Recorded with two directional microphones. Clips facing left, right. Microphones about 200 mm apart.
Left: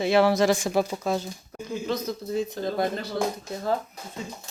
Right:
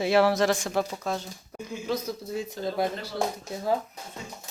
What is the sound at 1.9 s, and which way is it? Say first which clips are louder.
Speech: left 1 dB; 10° right (ahead or behind).